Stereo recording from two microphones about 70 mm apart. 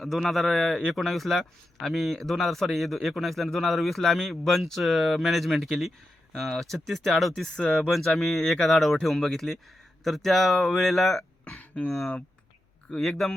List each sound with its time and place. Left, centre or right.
0.0 s a man's voice: centre
11.4 s a sound: centre
13.0 s a man's voice: centre